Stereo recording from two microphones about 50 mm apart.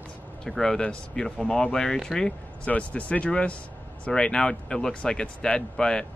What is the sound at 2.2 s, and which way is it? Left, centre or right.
Speech, left.